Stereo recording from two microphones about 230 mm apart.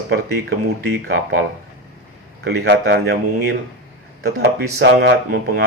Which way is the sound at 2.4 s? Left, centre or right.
Right.